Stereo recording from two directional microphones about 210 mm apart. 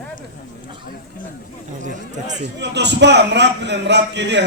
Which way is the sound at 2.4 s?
55° right (ahead or behind).